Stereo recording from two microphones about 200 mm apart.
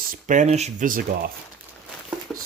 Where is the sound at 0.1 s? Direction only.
40° right (ahead or behind).